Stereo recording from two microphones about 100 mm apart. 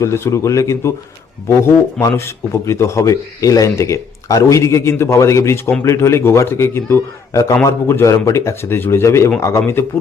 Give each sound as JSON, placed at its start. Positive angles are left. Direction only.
{"t": 0.0, "sound": "speech", "side_deg": 30}
{"t": 2.0, "sound": "speech", "side_deg": 30}